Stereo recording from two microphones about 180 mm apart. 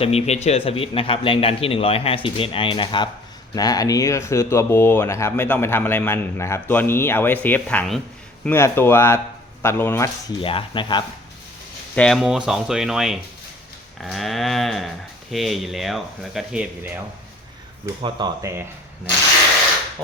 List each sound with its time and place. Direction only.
0.0 s a man's voice: 35° left (ahead or behind); by 10.1 s 15° left (ahead or behind)
10.4 s speech: 30° left (ahead or behind)
11.9 s speech: 5° left (ahead or behind)
17.8 s speech: 25° right (ahead or behind)